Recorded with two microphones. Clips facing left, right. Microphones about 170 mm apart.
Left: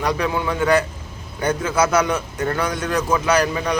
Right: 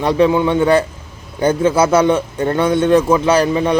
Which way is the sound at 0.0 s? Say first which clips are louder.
Right 8 dB; 25° right (ahead or behind).